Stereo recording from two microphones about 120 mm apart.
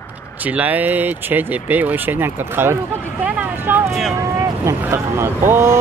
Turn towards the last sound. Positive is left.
turn(degrees=-20)  # may be behind; listen again after turning